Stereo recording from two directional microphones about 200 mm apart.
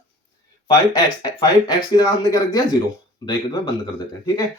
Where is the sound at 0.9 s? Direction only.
20° left (ahead or behind).